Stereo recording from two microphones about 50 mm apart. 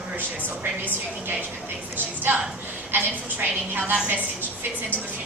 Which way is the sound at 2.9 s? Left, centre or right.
Right.